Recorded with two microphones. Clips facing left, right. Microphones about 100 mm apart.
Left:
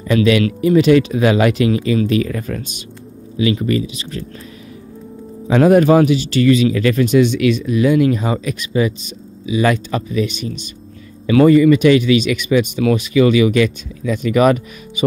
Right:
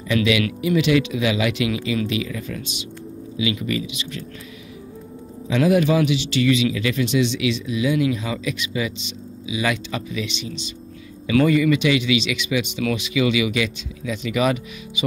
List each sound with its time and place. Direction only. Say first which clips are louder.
0.1 s speech: left 6 dB; 40° left (ahead or behind)
5.5 s speech: left 7 dB; 45° left (ahead or behind)